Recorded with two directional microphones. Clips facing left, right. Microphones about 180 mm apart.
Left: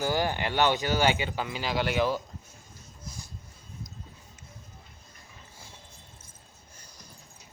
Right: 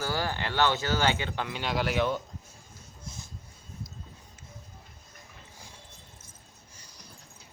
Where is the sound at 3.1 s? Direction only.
25° right (ahead or behind).